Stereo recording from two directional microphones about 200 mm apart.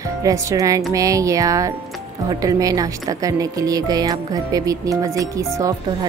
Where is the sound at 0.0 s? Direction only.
15° right (ahead or behind).